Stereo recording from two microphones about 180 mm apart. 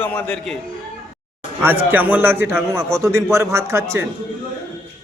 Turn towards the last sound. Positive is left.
turn(degrees=-15)  # may be behind; listen again after turning